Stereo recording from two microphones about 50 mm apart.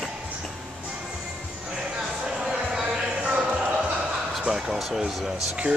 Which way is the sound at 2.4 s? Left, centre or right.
Centre.